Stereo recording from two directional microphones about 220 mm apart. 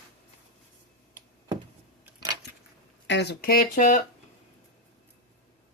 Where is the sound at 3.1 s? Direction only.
50° left (ahead or behind).